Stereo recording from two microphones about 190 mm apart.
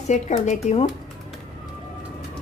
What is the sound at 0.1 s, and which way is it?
Speech, 35° left (ahead or behind).